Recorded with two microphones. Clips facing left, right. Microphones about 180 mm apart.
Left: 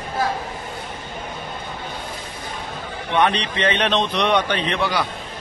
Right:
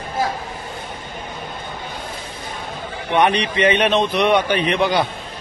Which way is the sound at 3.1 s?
15° right (ahead or behind).